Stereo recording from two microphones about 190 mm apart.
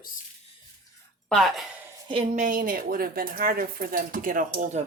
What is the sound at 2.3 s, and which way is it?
Speech, 45° right (ahead or behind).